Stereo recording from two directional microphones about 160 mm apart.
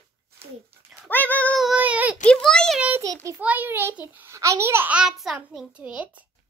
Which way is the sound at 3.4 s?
10° right (ahead or behind).